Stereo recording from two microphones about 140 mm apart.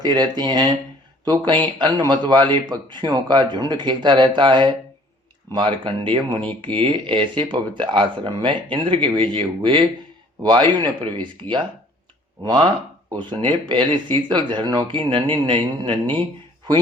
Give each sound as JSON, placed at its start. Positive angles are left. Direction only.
{"t": 0.0, "sound": "speech", "side_deg": -30}